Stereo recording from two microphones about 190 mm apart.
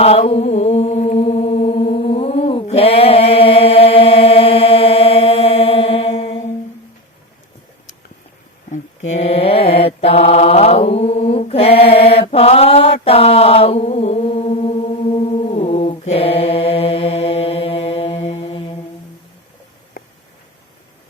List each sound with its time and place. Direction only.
0.0 s chant: 35° left (ahead or behind)
9.1 s mantra: 30° left (ahead or behind)